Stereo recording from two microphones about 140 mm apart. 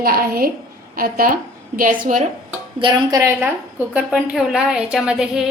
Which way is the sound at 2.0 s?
65° right (ahead or behind).